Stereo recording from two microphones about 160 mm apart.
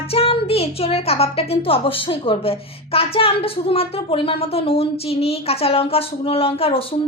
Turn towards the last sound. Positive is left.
turn(degrees=35)  # may be behind; listen again after turning